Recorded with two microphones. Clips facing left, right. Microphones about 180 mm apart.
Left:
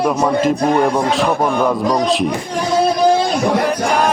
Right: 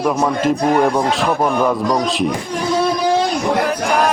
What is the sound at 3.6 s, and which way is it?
Music, centre (ahead or behind).